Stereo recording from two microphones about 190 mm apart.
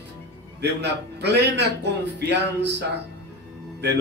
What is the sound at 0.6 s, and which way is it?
A man's voice, 60° right (ahead or behind).